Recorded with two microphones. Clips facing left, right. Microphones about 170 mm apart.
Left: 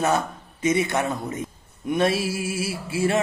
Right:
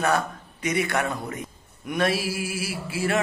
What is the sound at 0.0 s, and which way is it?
A man's voice, 25° left (ahead or behind).